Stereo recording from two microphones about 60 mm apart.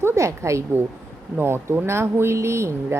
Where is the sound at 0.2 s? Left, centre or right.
Right.